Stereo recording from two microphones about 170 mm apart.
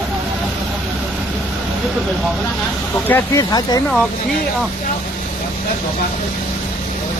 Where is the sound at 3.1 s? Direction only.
10° left (ahead or behind).